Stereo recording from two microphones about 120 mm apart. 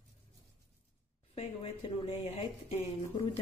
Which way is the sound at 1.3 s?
55° left (ahead or behind).